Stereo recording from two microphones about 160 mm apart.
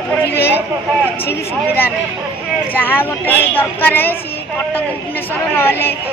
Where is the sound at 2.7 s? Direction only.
10° left (ahead or behind).